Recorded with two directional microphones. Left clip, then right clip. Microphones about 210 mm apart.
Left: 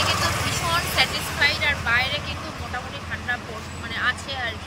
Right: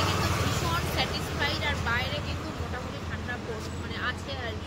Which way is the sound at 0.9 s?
10° right (ahead or behind).